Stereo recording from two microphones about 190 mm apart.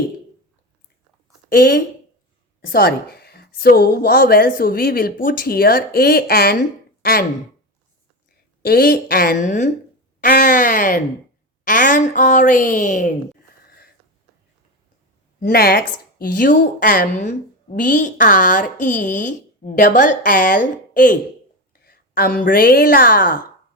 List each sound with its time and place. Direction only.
1.5 s a woman's voice: 45° left (ahead or behind)
8.6 s a woman's voice: 55° left (ahead or behind)
15.4 s a woman's voice: 50° left (ahead or behind)